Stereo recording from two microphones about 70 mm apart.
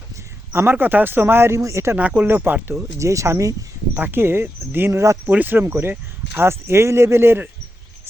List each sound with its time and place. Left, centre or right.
0.5 s speech: right
2.0 s speech: right
3.0 s speech: right
3.9 s speech: right
4.9 s speech: right
5.2 s speech: right